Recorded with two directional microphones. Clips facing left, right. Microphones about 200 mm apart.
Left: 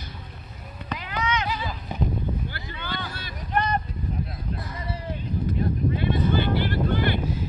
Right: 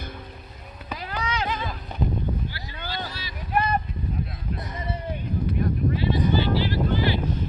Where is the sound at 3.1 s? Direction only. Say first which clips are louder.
Left 1 dB; 55° left (ahead or behind).